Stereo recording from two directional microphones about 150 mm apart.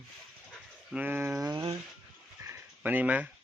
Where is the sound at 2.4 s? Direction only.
15° right (ahead or behind).